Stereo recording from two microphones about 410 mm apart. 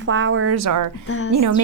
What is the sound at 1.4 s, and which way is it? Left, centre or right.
Speech, right.